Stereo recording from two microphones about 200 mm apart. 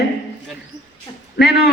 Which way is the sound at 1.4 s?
50° left (ahead or behind).